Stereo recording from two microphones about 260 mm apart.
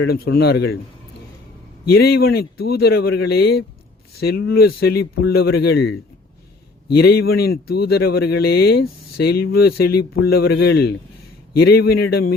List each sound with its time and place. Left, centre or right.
0.0 s speech: left
1.9 s speech: left